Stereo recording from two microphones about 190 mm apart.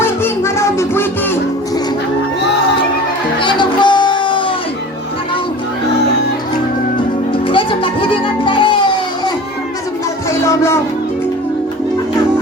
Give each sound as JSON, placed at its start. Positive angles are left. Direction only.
{"t": 0.0, "sound": "music", "side_deg": 15}
{"t": 3.3, "sound": "music", "side_deg": 25}
{"t": 7.5, "sound": "music", "side_deg": 25}
{"t": 10.4, "sound": "music", "side_deg": 15}